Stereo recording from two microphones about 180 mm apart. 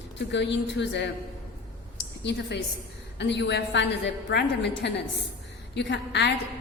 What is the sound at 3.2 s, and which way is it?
A woman's voice, 75° left (ahead or behind).